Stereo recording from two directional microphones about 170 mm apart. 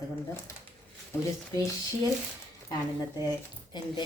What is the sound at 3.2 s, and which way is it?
Speech, 25° left (ahead or behind).